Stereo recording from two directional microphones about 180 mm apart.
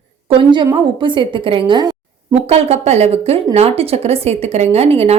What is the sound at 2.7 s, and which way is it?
A woman's voice, 35° right (ahead or behind).